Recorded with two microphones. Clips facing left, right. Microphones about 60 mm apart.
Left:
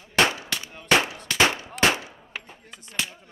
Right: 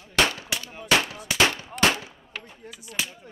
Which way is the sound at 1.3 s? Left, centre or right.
Left.